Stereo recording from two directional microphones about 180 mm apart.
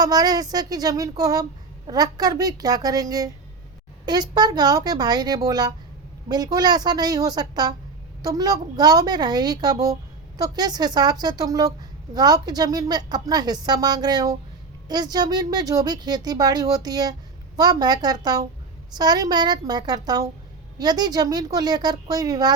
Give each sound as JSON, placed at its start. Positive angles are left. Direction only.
{"t": 0.0, "sound": "a woman's voice", "side_deg": -20}